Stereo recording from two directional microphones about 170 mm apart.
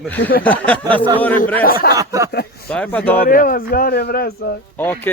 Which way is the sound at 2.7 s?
10° left (ahead or behind).